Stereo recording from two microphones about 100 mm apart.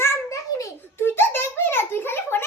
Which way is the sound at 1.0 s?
20° left (ahead or behind).